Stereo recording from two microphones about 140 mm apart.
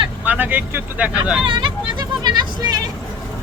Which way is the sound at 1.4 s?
35° right (ahead or behind).